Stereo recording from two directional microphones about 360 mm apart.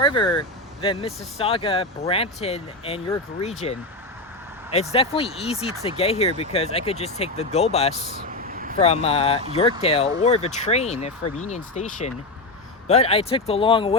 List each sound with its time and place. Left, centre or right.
0.0 s speech: centre
8.1 s vehicle: right
8.8 s speech: centre